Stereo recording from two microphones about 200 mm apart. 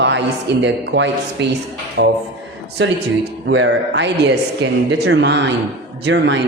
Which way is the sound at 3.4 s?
65° right (ahead or behind).